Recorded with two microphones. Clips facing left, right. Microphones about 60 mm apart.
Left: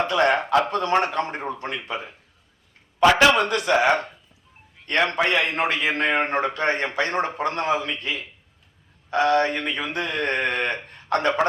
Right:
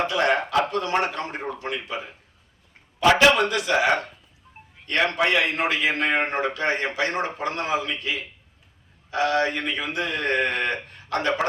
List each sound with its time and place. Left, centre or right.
0.1 s a man's voice: left
3.4 s a man's voice: left
4.9 s a man's voice: left